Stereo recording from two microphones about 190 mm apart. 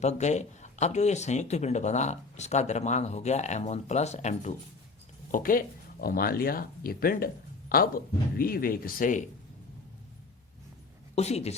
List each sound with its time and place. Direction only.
0.0 s speech: 35° left (ahead or behind)
11.1 s a woman's voice: 35° left (ahead or behind)